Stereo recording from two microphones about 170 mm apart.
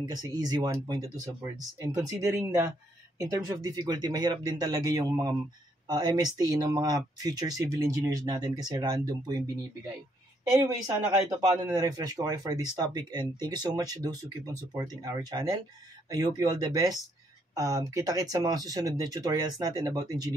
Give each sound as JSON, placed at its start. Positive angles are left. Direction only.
{"t": 0.0, "sound": "speech", "side_deg": -25}
{"t": 10.6, "sound": "speech", "side_deg": -20}